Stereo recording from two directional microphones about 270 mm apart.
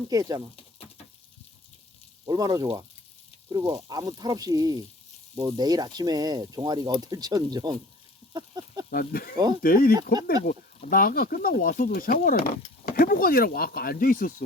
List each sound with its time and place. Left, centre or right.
0.1 s speech: centre
2.2 s speech: centre
8.3 s a sound: centre
8.9 s speech: left
9.3 s speech: centre
9.6 s speech: left